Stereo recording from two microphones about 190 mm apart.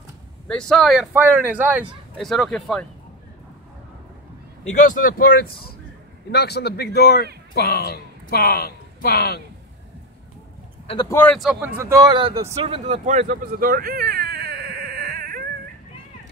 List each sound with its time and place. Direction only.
0.5 s speech: 5° left (ahead or behind)
4.8 s a man's voice: 45° left (ahead or behind)
11.1 s speech: 10° left (ahead or behind)
11.3 s a man's voice: 5° right (ahead or behind); by 12.4 s 30° right (ahead or behind)
12.5 s baby cry: 35° right (ahead or behind); by 15.4 s 50° right (ahead or behind)